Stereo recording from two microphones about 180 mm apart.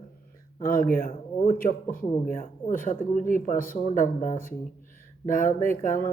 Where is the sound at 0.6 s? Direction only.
55° left (ahead or behind).